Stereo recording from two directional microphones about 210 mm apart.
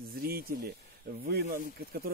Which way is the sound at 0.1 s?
45° right (ahead or behind).